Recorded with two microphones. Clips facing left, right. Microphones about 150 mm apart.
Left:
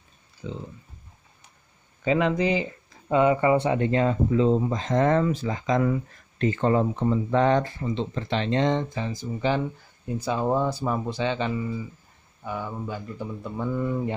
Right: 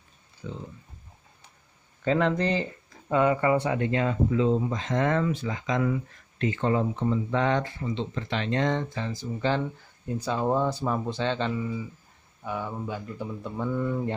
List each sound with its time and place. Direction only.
0.4 s speech: 20° left (ahead or behind)
2.0 s speech: 10° left (ahead or behind)